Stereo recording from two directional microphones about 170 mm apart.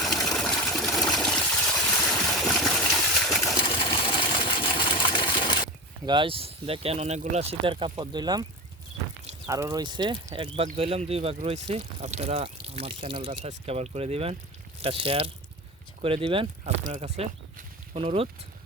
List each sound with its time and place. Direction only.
0.0 s water: centre (ahead or behind)
3.4 s sewing machine: 25° left (ahead or behind)
6.1 s speech: 30° right (ahead or behind)
9.5 s speech: 20° right (ahead or behind)